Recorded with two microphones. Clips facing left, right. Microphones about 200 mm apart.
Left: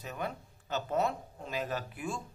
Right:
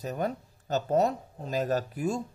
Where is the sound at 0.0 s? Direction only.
40° right (ahead or behind).